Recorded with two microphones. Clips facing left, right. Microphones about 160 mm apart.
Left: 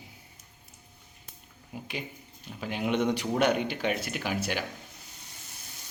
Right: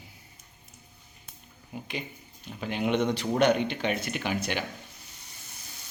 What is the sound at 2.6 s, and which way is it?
Speech, 5° left (ahead or behind).